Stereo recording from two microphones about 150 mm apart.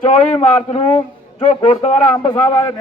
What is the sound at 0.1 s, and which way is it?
A man's voice, 45° left (ahead or behind).